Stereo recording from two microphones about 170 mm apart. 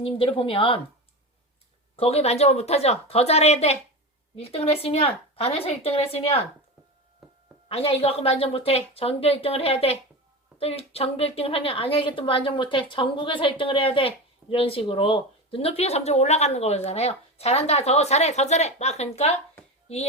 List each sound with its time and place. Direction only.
0.0 s speech: 30° left (ahead or behind)
2.0 s speech: 35° left (ahead or behind)
7.2 s a sound: centre (ahead or behind)
7.7 s speech: 35° left (ahead or behind)